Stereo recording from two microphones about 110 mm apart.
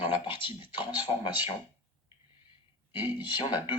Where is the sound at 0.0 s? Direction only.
50° left (ahead or behind).